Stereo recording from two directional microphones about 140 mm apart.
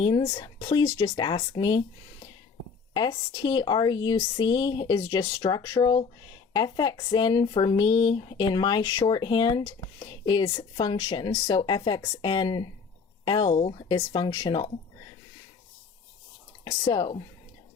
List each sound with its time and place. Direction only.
0.0 s speech: 35° left (ahead or behind)
2.9 s speech: 30° left (ahead or behind)
16.6 s speech: 25° left (ahead or behind)